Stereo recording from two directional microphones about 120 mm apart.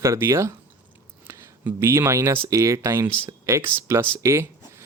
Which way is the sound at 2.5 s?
25° right (ahead or behind).